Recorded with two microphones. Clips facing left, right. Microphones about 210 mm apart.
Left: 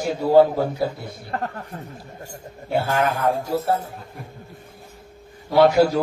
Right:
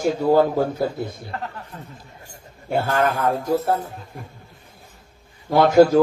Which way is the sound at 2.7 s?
45° right (ahead or behind).